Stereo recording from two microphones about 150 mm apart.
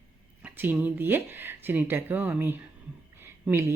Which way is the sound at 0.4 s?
10° right (ahead or behind).